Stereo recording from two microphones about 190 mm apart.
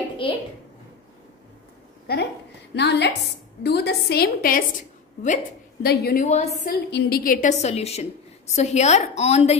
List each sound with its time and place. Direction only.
2.1 s a woman's voice: 55° left (ahead or behind); by 6.5 s 40° left (ahead or behind)
6.6 s a woman's voice: 55° left (ahead or behind); by 9.6 s 35° left (ahead or behind)